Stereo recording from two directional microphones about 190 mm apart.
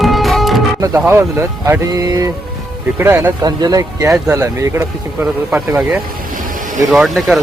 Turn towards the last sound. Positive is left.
turn(degrees=0)  # may be behind; listen again after turning